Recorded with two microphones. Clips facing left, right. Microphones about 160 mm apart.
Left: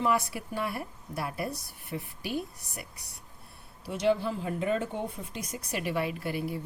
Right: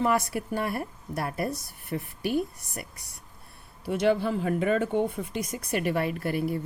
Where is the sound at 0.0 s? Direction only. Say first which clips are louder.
Right 3 dB; 45° right (ahead or behind).